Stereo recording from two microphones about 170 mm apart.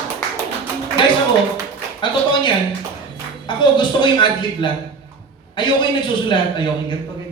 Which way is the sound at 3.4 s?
25° left (ahead or behind).